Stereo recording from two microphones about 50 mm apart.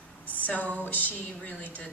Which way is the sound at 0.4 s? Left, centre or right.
Left.